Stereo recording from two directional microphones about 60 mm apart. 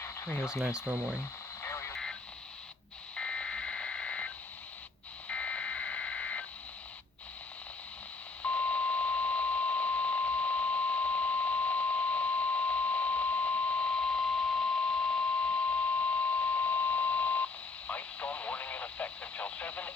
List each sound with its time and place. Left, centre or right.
0.9 s speech: right
1.6 s radio: left
3.2 s fire alarm: centre
5.3 s a sound: left
8.4 s alarm clock: left